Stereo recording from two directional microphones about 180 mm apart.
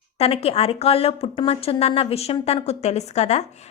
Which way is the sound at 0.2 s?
35° left (ahead or behind).